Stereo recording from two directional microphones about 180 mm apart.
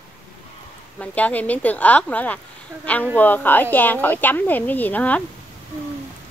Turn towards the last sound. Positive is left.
turn(degrees=10)  # may be behind; listen again after turning